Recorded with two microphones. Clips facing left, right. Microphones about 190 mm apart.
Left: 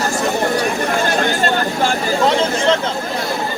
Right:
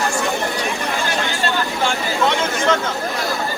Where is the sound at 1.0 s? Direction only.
50° left (ahead or behind); by 2.8 s 35° left (ahead or behind).